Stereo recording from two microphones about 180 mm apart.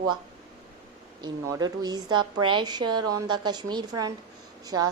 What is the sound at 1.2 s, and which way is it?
A woman's voice, 20° right (ahead or behind).